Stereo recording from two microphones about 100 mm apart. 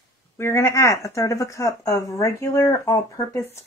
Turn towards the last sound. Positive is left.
turn(degrees=30)  # may be behind; listen again after turning